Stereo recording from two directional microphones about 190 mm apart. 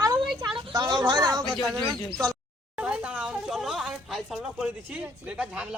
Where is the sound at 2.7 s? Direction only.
5° right (ahead or behind).